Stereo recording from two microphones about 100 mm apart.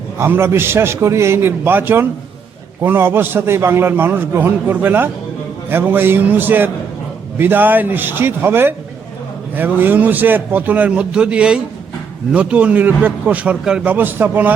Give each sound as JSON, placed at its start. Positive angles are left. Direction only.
{"t": 0.2, "sound": "a man's voice", "side_deg": -25}